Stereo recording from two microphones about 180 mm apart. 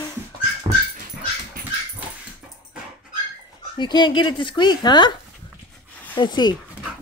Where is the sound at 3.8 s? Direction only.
25° left (ahead or behind).